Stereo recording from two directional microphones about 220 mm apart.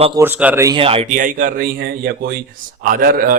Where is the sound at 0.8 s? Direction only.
25° right (ahead or behind).